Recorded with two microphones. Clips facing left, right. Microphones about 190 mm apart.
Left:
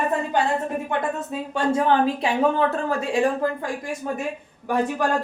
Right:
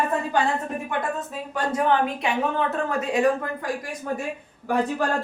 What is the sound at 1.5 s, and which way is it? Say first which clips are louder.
Speech: left 2 dB; 30° left (ahead or behind).